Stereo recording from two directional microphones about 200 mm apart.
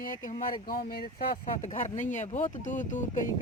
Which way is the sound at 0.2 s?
40° left (ahead or behind).